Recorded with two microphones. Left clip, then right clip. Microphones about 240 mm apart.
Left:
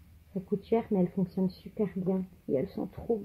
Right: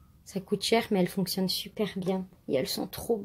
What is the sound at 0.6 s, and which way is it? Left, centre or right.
Speech, right.